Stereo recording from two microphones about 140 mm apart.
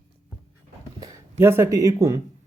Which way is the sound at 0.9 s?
25° right (ahead or behind).